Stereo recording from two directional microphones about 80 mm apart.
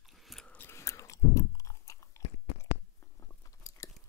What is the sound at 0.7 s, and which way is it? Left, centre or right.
Chewing, left.